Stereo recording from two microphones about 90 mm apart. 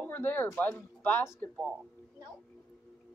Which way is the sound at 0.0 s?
20° left (ahead or behind).